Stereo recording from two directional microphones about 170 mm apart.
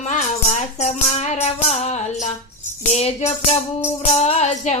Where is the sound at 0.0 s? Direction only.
45° left (ahead or behind).